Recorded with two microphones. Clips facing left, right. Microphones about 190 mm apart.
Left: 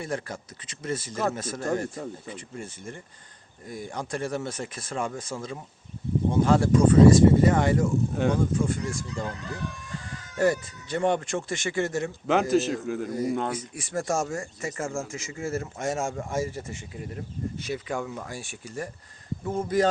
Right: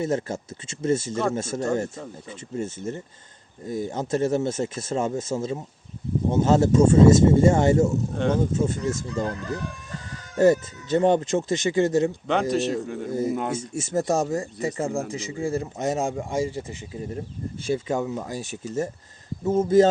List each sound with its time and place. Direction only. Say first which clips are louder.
0.0 s speech: right 7 dB; 25° right (ahead or behind)
8.1 s speech: right 1 dB; 5° left (ahead or behind)
8.4 s speech: right 2 dB; 25° right (ahead or behind)
10.3 s speech: right 6 dB; 20° right (ahead or behind)
12.3 s speech: left 3 dB; 5° left (ahead or behind)
13.1 s speech: right 4 dB; 25° right (ahead or behind)
17.6 s speech: right 8 dB; 25° right (ahead or behind)